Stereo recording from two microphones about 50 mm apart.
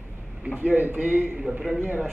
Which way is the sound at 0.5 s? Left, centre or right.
Right.